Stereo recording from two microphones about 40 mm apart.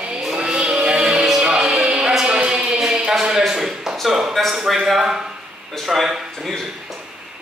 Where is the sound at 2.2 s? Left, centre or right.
Right.